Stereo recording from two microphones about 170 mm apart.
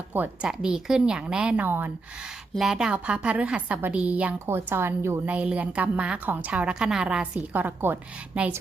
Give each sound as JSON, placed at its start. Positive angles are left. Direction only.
{"t": 0.1, "sound": "a woman's voice", "side_deg": -10}